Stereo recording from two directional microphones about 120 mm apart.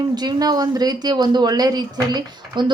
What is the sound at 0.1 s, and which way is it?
Speech, 35° right (ahead or behind).